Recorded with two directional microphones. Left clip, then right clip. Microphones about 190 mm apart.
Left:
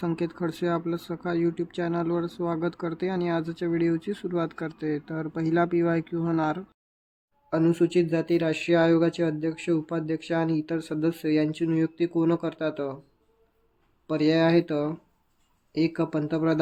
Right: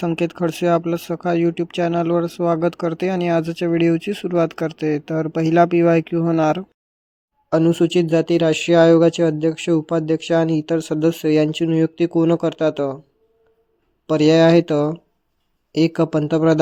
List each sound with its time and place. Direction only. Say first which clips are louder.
0.0 s speech: right 9 dB; 40° right (ahead or behind)
14.1 s speech: right 9 dB; 40° right (ahead or behind)